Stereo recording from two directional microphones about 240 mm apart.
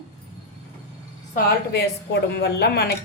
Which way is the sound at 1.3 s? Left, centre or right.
Left.